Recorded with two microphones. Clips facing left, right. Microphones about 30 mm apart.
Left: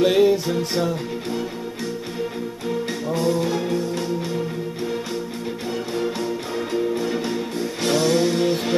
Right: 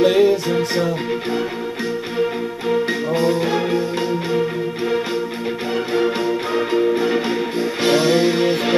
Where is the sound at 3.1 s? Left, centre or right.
Right.